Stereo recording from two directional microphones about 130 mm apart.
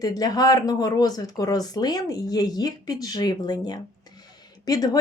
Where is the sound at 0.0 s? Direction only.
30° left (ahead or behind).